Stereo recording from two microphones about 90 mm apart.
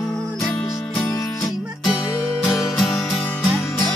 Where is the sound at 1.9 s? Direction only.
15° right (ahead or behind).